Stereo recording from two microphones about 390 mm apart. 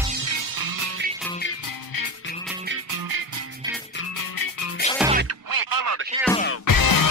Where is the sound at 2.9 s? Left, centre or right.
Right.